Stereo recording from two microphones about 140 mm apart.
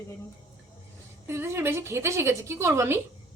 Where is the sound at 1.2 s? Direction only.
20° right (ahead or behind).